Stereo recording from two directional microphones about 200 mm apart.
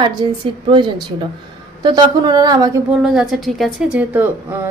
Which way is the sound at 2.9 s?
Centre (ahead or behind).